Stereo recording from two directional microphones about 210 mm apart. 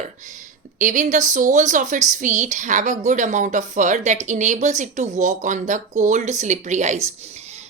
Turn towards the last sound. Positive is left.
turn(degrees=-35)  # may be behind; listen again after turning